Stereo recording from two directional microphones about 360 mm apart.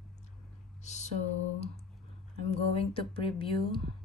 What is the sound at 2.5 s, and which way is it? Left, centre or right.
Speech, centre.